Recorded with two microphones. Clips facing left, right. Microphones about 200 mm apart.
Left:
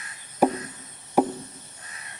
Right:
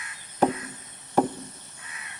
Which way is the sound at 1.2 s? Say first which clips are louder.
Left 1 dB; 10° left (ahead or behind).